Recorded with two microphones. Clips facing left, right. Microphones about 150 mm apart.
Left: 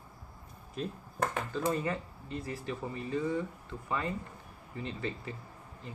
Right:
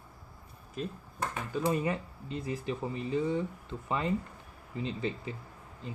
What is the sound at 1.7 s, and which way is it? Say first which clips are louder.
Speech: right 3 dB; 15° right (ahead or behind).